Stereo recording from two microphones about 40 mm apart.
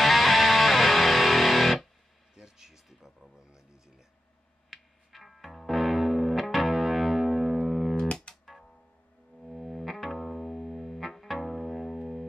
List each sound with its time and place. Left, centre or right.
0.0 s music: centre
2.3 s a sound: centre
4.6 s music: centre
7.9 s music: left
9.4 s music: centre